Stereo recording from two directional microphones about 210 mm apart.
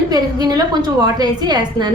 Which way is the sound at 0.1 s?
20° right (ahead or behind).